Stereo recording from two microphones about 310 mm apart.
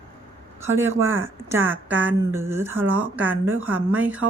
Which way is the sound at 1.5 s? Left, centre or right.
Centre.